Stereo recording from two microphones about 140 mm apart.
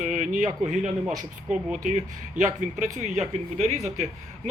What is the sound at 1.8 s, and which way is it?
Speech, 60° right (ahead or behind).